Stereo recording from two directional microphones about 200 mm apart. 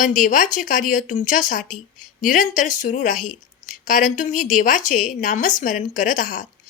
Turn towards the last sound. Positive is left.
turn(degrees=40)  # may be behind; listen again after turning